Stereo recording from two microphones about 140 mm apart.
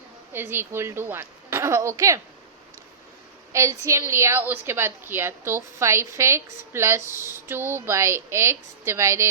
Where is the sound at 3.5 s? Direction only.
20° right (ahead or behind).